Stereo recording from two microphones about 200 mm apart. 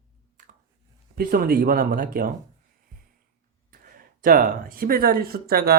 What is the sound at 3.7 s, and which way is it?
Speech, 45° right (ahead or behind).